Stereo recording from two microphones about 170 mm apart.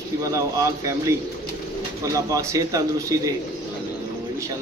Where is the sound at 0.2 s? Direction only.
20° right (ahead or behind).